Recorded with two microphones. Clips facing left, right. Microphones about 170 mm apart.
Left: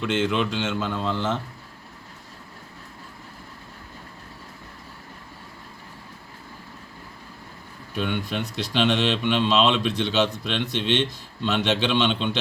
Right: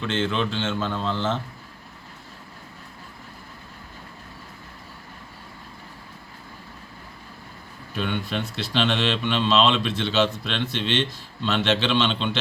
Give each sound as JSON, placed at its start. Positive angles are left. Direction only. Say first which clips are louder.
{"t": 0.0, "sound": "a man's voice", "louder": "left 2 dB", "side_deg": 10}
{"t": 7.9, "sound": "a man's voice", "louder": "even", "side_deg": 15}